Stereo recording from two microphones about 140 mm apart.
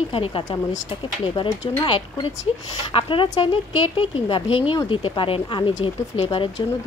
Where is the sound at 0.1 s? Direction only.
40° left (ahead or behind).